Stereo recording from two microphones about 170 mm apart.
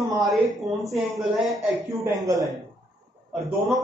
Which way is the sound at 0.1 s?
Centre (ahead or behind).